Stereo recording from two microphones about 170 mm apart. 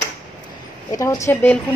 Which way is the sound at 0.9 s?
20° left (ahead or behind).